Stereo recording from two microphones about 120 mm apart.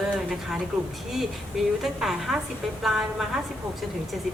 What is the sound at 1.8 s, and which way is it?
A woman's voice, 5° right (ahead or behind).